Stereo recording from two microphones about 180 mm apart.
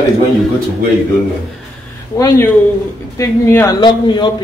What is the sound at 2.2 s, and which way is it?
Speech, 20° left (ahead or behind).